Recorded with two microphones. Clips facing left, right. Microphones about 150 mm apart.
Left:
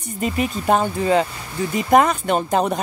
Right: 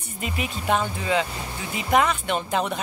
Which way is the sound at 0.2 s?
40° left (ahead or behind).